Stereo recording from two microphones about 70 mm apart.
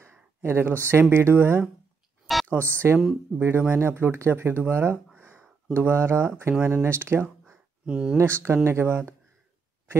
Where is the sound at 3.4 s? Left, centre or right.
Right.